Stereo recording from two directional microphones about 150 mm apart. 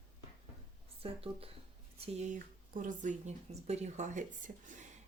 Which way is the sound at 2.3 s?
60° right (ahead or behind).